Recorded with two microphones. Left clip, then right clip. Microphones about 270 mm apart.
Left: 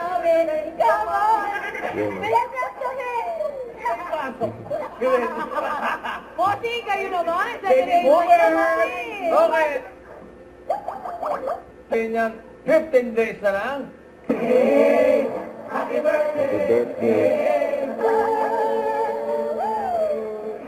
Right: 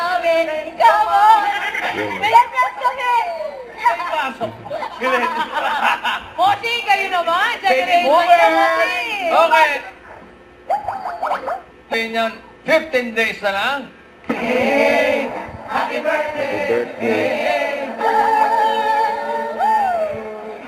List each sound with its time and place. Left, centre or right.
0.0 s a sound: centre
3.8 s chatter: centre
4.8 s chuckle: centre
7.1 s a woman's voice: centre
11.2 s speech: centre
14.3 s a sound: centre